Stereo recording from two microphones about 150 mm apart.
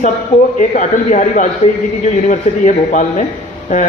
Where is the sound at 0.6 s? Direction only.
55° left (ahead or behind).